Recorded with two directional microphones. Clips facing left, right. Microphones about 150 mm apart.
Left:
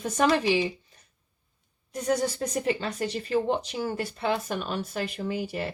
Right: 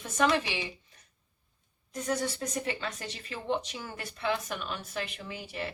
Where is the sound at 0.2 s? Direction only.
40° left (ahead or behind).